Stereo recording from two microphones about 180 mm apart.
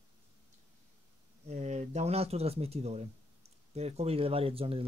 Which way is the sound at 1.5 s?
40° right (ahead or behind).